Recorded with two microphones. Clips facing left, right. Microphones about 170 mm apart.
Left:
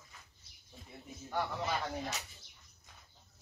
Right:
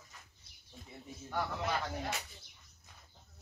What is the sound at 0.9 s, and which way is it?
Speech, centre (ahead or behind).